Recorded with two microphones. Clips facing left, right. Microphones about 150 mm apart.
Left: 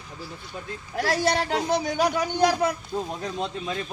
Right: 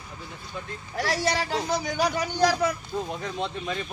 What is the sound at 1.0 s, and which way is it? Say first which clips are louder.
Speech: left 3 dB; 55° left (ahead or behind).